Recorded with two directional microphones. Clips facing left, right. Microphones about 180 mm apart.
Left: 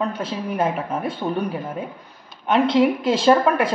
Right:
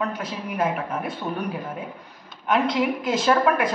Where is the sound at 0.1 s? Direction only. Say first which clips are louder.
Left 4 dB; 30° left (ahead or behind).